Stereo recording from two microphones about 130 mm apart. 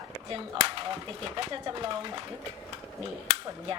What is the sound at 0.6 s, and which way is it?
Speech, 40° right (ahead or behind).